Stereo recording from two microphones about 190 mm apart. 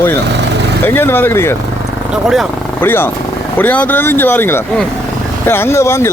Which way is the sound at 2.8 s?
10° left (ahead or behind).